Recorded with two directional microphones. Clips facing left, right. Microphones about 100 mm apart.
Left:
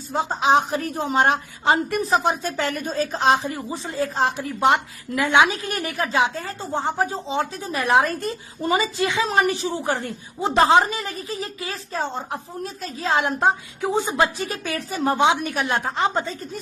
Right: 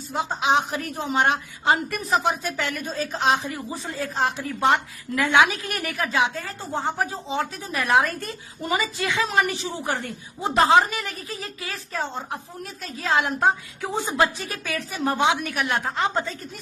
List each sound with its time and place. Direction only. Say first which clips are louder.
0.1 s a woman's voice: left 3 dB; 35° left (ahead or behind)
4.6 s a woman's voice: left 2 dB; 15° left (ahead or behind)
9.3 s a woman's voice: left 3 dB; 35° left (ahead or behind); by 14.3 s 20° left (ahead or behind)
14.3 s a woman's voice: left 3 dB; 30° left (ahead or behind)